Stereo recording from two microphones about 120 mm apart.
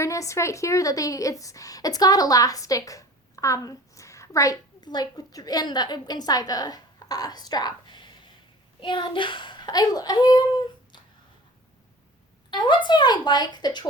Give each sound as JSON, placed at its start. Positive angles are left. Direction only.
{"t": 0.0, "sound": "a woman's voice", "side_deg": 25}
{"t": 12.5, "sound": "a child's voice", "side_deg": 40}